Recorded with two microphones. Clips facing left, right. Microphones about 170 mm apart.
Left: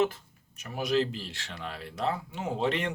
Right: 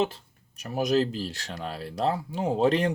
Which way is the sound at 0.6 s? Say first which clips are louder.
Right 4 dB; 40° right (ahead or behind).